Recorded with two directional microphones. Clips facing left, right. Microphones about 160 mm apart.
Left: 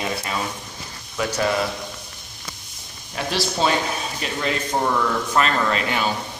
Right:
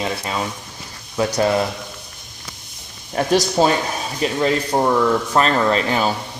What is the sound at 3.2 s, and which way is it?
A man's voice, 45° right (ahead or behind).